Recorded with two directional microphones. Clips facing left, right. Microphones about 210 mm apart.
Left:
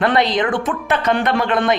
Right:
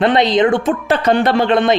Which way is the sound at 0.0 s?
25° right (ahead or behind).